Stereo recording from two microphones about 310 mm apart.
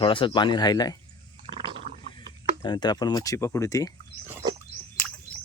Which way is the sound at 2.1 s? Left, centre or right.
Centre.